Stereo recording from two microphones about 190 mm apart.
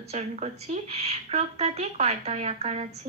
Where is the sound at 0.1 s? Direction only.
35° right (ahead or behind).